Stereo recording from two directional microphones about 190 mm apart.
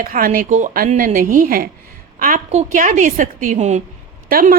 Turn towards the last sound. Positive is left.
turn(degrees=-50)  # may be behind; listen again after turning